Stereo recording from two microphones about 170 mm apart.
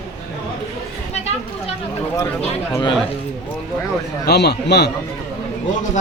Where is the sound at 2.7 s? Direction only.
25° left (ahead or behind).